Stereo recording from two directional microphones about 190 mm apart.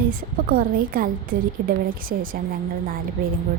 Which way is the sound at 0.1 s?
50° right (ahead or behind).